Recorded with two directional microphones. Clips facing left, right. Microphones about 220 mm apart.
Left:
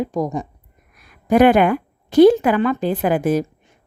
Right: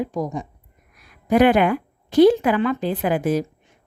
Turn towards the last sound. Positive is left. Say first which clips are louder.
# left 3 dB
turn(degrees=50)  # may be behind; listen again after turning